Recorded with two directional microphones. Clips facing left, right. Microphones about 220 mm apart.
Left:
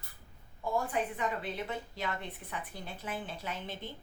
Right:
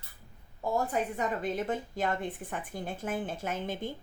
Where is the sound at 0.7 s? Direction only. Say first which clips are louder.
Right 3 dB; 45° right (ahead or behind).